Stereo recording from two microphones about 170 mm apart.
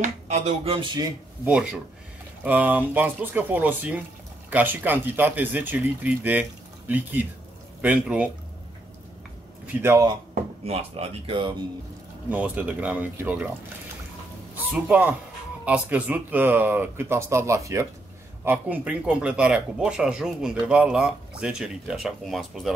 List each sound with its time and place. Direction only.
0.0 s speech: 40° right (ahead or behind)
1.4 s speech: 5° right (ahead or behind)
9.8 s speech: 20° right (ahead or behind)
10.6 s speech: 35° right (ahead or behind)
12.3 s speech: 10° right (ahead or behind)
14.6 s speech: 10° right (ahead or behind)